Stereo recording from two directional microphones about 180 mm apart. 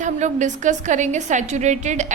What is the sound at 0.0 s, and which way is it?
A woman's voice, 45° right (ahead or behind).